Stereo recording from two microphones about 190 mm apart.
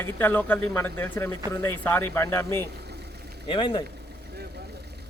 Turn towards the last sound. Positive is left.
turn(degrees=25)  # may be behind; listen again after turning